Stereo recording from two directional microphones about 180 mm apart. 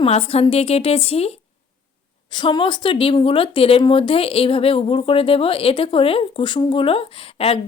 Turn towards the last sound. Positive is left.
turn(degrees=30)  # may be behind; listen again after turning